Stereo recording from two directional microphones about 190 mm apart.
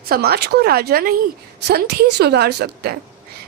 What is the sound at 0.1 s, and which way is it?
A woman's voice, 55° right (ahead or behind).